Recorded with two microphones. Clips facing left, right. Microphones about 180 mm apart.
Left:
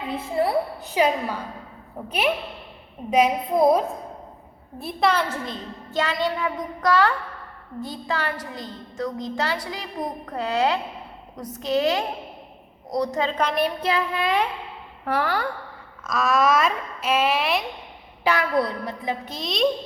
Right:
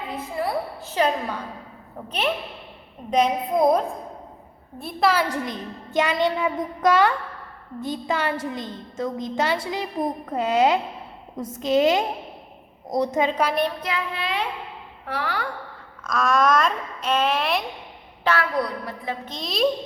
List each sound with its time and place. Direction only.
0.2 s a woman's voice: 25° left (ahead or behind)
0.9 s a woman's voice: 10° left (ahead or behind)
5.3 s a woman's voice: 15° right (ahead or behind)
13.8 s child singing: 35° left (ahead or behind)
15.0 s a woman's voice: 50° left (ahead or behind)
16.0 s speech: centre (ahead or behind)
18.2 s a sound: 15° left (ahead or behind)
18.5 s a woman's voice: 20° left (ahead or behind)
19.3 s speech: centre (ahead or behind)